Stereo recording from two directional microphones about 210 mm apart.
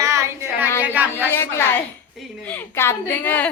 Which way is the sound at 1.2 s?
10° left (ahead or behind).